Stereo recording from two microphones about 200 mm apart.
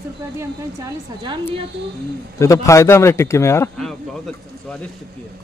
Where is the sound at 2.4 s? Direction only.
15° left (ahead or behind).